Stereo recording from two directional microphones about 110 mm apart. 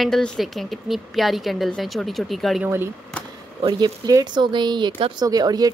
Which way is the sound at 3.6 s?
40° right (ahead or behind).